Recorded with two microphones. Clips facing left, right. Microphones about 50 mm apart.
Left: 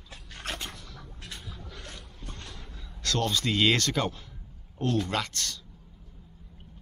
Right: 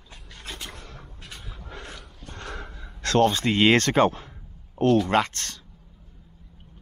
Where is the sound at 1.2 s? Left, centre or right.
Centre.